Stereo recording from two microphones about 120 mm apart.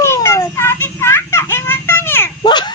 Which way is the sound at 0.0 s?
20° left (ahead or behind).